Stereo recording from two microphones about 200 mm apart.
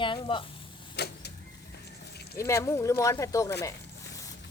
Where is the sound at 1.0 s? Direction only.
55° left (ahead or behind).